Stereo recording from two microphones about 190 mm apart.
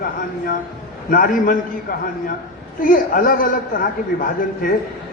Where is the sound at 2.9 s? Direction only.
45° left (ahead or behind).